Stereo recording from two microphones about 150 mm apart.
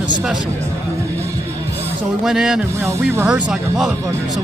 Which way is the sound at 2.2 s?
5° right (ahead or behind).